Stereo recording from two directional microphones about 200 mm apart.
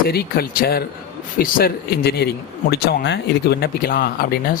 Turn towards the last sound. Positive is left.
turn(degrees=50)  # may be behind; listen again after turning